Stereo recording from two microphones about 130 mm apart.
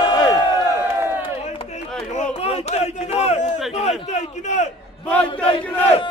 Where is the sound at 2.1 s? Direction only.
60° left (ahead or behind).